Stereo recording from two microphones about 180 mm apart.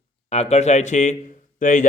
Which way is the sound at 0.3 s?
35° left (ahead or behind).